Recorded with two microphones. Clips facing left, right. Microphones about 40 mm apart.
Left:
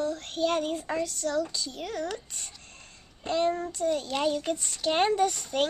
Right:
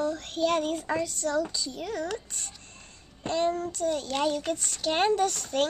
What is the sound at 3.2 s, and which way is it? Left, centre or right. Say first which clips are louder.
Child singing: even; centre.